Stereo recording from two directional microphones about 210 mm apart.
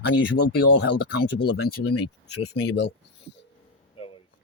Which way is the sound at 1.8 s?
90° left.